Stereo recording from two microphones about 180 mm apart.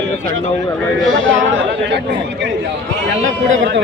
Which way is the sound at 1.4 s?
90° right.